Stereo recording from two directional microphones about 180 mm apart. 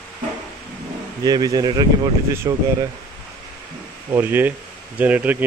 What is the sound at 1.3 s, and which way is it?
Speech, 20° right (ahead or behind).